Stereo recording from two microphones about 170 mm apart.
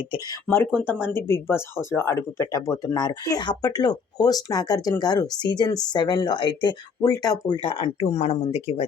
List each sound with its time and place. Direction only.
0.4 s speech: 10° left (ahead or behind); by 8.9 s 35° left (ahead or behind)